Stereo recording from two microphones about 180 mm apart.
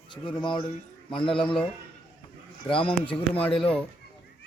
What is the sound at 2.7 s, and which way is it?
Speech, 30° left (ahead or behind).